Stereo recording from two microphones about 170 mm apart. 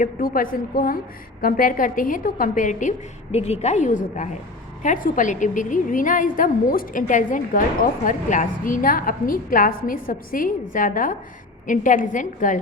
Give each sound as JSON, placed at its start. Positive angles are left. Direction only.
{"t": 0.0, "sound": "a woman's voice", "side_deg": 55}